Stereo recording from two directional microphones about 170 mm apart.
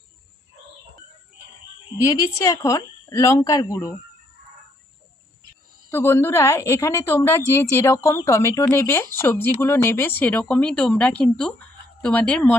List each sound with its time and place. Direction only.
2.0 s speech: 20° left (ahead or behind)
5.9 s a woman's voice: 15° left (ahead or behind)